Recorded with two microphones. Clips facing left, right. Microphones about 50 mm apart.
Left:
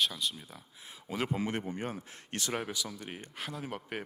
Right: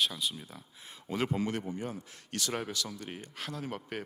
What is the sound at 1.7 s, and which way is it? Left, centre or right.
Speech, left.